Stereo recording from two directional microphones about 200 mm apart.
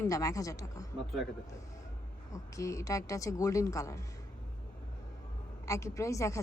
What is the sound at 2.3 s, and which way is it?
A woman's voice, 15° left (ahead or behind).